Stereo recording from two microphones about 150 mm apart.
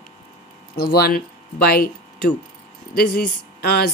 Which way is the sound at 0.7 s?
90° left.